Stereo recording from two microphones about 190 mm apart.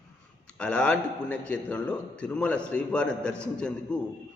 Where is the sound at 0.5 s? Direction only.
5° left (ahead or behind).